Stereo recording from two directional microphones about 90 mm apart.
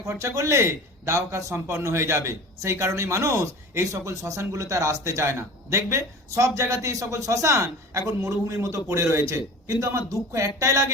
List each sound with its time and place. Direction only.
0.0 s a man's voice: 35° right (ahead or behind)